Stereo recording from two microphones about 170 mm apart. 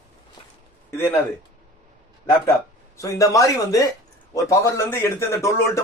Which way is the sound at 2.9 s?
20° left (ahead or behind).